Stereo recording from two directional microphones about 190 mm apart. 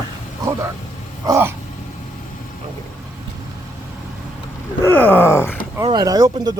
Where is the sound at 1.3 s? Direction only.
10° right (ahead or behind).